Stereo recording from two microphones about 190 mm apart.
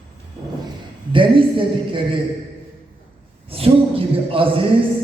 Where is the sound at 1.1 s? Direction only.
25° right (ahead or behind).